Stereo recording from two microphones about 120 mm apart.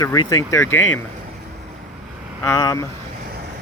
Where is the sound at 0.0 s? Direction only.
25° left (ahead or behind).